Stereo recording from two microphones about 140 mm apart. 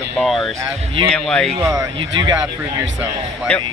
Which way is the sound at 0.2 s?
Centre (ahead or behind).